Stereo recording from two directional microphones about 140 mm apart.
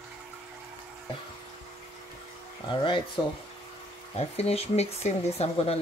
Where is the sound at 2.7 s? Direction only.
35° left (ahead or behind).